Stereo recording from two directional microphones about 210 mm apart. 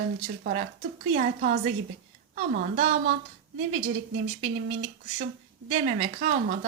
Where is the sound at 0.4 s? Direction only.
45° right (ahead or behind).